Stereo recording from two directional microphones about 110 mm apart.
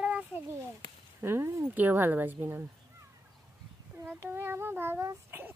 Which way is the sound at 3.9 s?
20° right (ahead or behind).